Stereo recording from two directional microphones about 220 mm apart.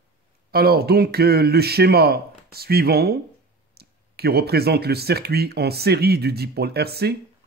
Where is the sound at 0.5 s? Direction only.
45° right (ahead or behind).